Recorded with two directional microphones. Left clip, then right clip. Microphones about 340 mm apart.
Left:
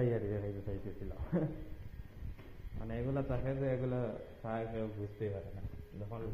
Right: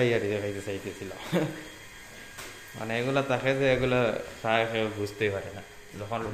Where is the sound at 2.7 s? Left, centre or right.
Centre.